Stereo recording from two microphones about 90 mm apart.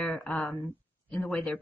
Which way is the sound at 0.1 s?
15° left (ahead or behind).